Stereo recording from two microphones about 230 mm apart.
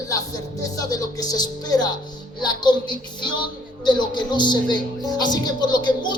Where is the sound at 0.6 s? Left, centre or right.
Centre.